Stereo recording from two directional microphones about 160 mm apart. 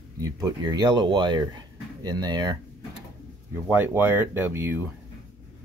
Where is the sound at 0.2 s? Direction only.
25° right (ahead or behind).